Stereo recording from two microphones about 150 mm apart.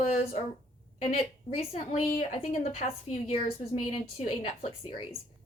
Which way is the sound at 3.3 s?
40° left (ahead or behind).